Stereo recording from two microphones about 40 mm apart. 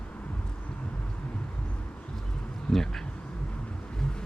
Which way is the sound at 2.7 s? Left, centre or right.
Centre.